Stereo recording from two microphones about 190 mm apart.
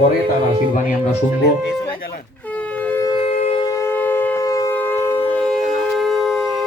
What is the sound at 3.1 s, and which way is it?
Shofar, 30° left (ahead or behind).